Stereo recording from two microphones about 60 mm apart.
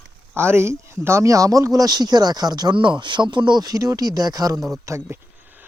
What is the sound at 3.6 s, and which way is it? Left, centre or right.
Speech, right.